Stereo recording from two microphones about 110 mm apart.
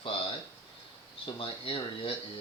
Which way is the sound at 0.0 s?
60° left (ahead or behind).